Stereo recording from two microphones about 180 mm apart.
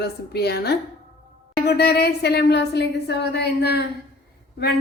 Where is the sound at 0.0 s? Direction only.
65° left (ahead or behind).